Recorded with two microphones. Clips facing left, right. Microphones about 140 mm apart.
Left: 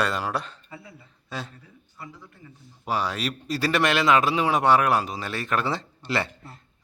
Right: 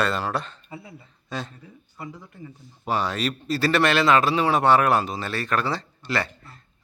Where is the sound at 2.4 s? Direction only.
15° right (ahead or behind).